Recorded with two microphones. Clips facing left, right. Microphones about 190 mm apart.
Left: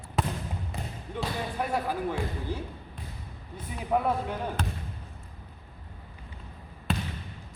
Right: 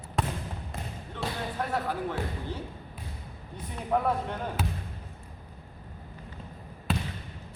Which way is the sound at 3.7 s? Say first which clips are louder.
Even; 10° left (ahead or behind).